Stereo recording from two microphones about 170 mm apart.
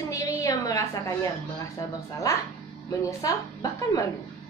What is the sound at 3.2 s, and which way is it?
Speech, 20° left (ahead or behind).